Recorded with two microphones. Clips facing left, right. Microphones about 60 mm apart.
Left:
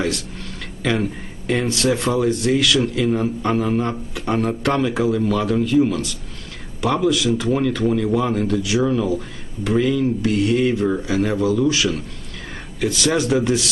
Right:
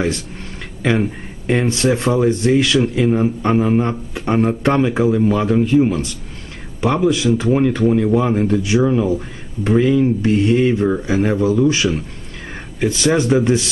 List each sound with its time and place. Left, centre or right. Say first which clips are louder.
1.5 s speech: right 3 dB; right